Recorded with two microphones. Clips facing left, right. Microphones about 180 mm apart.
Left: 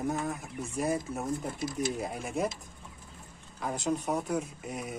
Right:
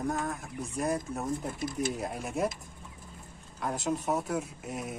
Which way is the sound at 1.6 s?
50° right (ahead or behind).